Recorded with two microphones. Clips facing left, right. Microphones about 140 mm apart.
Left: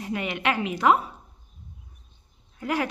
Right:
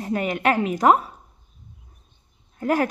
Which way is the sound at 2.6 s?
45° right (ahead or behind).